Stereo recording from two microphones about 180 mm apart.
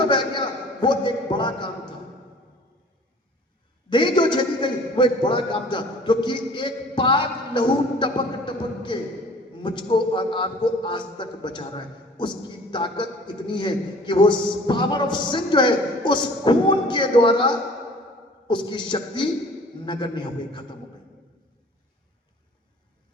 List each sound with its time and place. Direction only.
0.1 s a man's voice: 25° left (ahead or behind)
3.8 s a man's voice: 25° left (ahead or behind)